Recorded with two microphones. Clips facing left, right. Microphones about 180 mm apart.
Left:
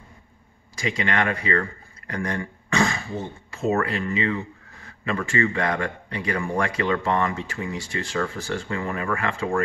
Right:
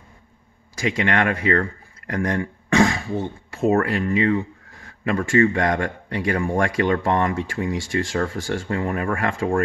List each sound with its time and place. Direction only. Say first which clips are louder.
0.7 s speech: right 4 dB; 55° right (ahead or behind)